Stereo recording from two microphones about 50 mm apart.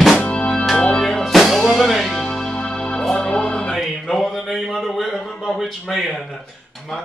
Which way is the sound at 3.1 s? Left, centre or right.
Centre.